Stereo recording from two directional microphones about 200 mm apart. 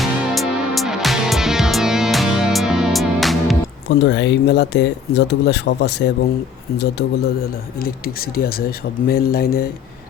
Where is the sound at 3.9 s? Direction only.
60° left (ahead or behind).